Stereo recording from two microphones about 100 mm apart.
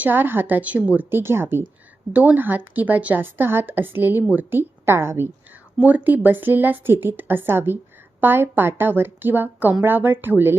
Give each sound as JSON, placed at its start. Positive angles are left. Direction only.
{"t": 0.0, "sound": "a woman's voice", "side_deg": -20}